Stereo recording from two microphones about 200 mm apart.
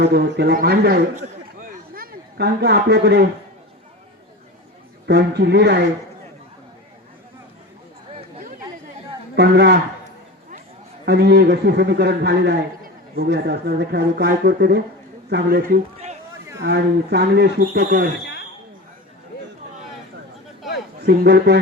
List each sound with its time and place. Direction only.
0.0 s a man's voice: 55° right (ahead or behind)
1.1 s a sound: 45° right (ahead or behind)
5.0 s speech: 55° right (ahead or behind)
9.3 s speech: 60° right (ahead or behind)
11.0 s a man's voice: 55° right (ahead or behind)
18.1 s a sound: 55° left (ahead or behind)
21.0 s speech: 55° right (ahead or behind)